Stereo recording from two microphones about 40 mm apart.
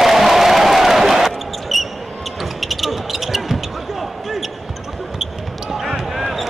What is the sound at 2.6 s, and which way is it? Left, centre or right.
Basketball bounce, centre.